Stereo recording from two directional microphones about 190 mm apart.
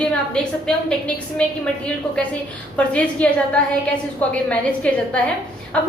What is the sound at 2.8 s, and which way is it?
A woman's voice, 5° left (ahead or behind).